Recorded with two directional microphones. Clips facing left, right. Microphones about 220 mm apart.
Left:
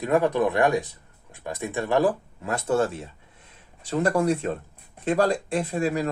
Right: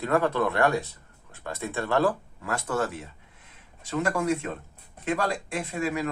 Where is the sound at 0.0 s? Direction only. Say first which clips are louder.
Left 3 dB; 15° left (ahead or behind).